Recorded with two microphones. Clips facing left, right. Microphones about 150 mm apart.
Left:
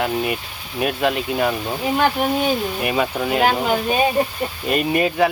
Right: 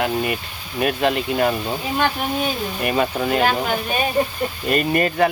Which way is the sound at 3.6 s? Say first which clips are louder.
Left 3 dB; 15° left (ahead or behind).